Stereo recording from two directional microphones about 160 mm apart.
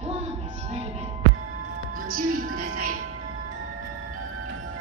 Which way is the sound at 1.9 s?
60° right (ahead or behind).